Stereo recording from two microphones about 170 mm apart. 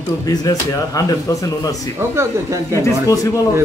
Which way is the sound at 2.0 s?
15° right (ahead or behind).